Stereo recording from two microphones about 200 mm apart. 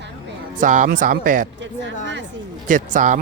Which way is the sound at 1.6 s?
65° right (ahead or behind).